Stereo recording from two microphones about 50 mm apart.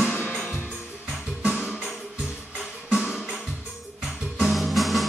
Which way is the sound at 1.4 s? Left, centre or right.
Centre.